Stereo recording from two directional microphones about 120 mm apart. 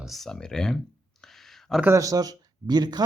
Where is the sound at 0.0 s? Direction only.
Centre (ahead or behind).